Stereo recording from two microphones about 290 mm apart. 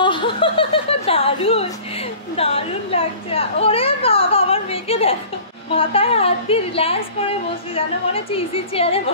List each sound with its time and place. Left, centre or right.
0.0 s chuckle: centre
2.3 s a woman's voice: centre